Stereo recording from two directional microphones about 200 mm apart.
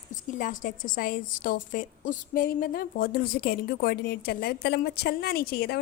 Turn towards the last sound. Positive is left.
turn(degrees=50)  # may be behind; listen again after turning